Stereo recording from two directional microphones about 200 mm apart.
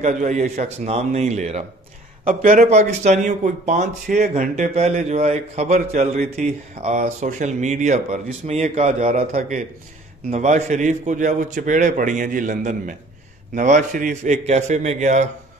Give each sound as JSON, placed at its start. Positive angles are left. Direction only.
{"t": 0.0, "sound": "speech", "side_deg": -35}